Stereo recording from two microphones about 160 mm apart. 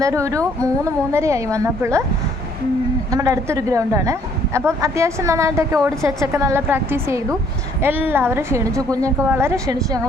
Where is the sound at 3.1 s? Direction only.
20° right (ahead or behind).